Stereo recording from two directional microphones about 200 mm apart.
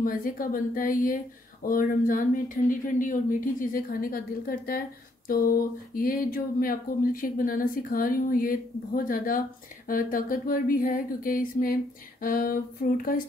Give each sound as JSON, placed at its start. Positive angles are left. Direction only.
{"t": 0.0, "sound": "speech", "side_deg": 45}